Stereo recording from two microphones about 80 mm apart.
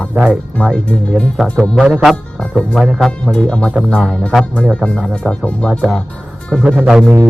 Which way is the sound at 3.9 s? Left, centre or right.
Centre.